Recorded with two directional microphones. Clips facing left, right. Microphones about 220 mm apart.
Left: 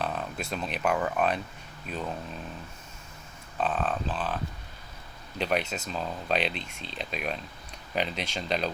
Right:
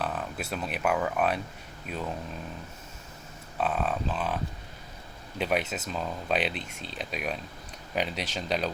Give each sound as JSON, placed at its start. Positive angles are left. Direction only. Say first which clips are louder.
{"t": 0.0, "sound": "speech", "louder": "even", "side_deg": -5}
{"t": 3.6, "sound": "speech", "louder": "even", "side_deg": -10}
{"t": 5.4, "sound": "speech", "louder": "even", "side_deg": -5}
{"t": 6.6, "sound": "speech", "louder": "right 1 dB", "side_deg": -45}
{"t": 6.8, "sound": "speech", "louder": "even", "side_deg": -5}